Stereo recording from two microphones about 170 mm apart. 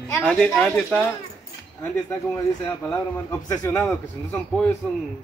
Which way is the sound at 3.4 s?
20° left (ahead or behind).